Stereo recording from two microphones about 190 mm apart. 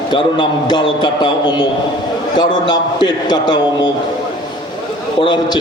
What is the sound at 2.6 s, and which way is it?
Speech, 25° left (ahead or behind).